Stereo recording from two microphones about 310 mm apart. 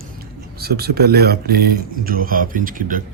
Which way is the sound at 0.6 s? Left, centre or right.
Right.